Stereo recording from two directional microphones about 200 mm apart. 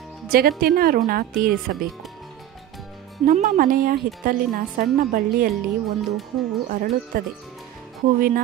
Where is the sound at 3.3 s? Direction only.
45° right (ahead or behind).